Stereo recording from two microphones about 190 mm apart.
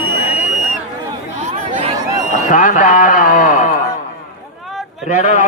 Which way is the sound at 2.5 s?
40° left (ahead or behind).